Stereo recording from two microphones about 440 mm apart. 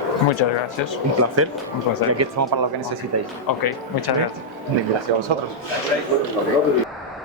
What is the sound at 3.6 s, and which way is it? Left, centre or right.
Speech, left.